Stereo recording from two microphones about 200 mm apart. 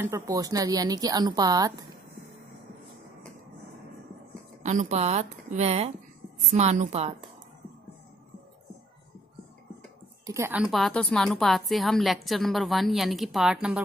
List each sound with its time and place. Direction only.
0.0 s speech: 15° right (ahead or behind)
4.6 s speech: 35° right (ahead or behind)
10.2 s a woman's voice: 15° right (ahead or behind)